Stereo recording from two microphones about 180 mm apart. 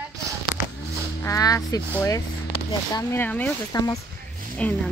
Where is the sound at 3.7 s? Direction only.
20° left (ahead or behind).